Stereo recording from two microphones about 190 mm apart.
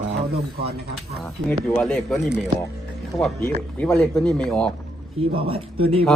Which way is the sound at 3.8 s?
5° left (ahead or behind).